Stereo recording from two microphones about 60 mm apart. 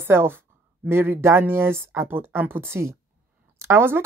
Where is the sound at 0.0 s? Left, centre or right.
Right.